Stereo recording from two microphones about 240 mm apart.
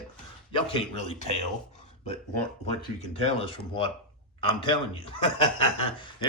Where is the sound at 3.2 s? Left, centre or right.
Left.